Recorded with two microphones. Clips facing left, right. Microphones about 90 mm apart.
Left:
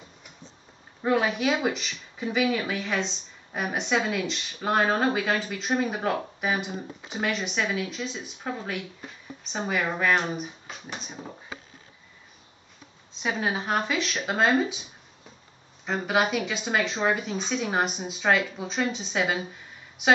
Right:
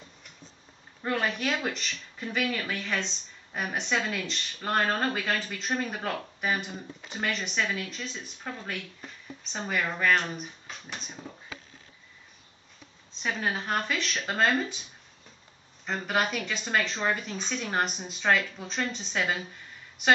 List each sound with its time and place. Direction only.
1.0 s speech: 5° left (ahead or behind)
11.2 s speech: 25° left (ahead or behind)
13.2 s speech: 5° left (ahead or behind)